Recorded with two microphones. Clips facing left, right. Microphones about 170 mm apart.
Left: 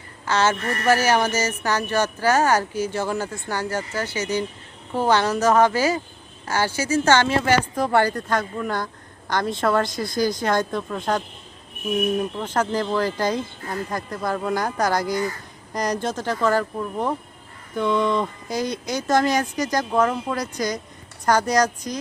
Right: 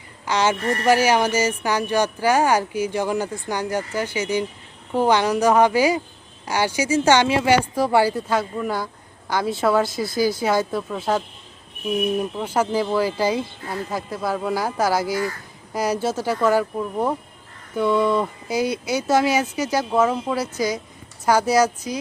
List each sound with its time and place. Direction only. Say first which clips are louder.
0.3 s speech: even; 15° right (ahead or behind)
0.6 s speech: right 4 dB; 30° right (ahead or behind)
0.9 s speech: right 1 dB; 10° right (ahead or behind)